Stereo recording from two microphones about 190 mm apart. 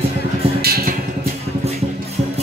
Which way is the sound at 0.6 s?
55° right (ahead or behind).